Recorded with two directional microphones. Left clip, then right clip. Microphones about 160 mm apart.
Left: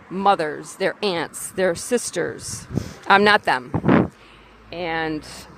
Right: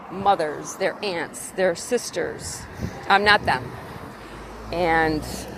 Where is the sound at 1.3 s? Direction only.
40° left (ahead or behind).